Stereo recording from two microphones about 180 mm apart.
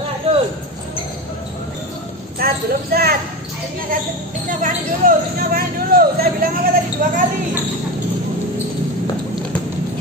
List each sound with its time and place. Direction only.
0.3 s basketball bounce: 30° right (ahead or behind)
2.3 s speech: 55° right (ahead or behind)
4.5 s speech: 50° right (ahead or behind)